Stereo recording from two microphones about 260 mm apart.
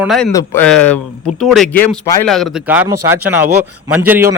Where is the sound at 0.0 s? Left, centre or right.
Centre.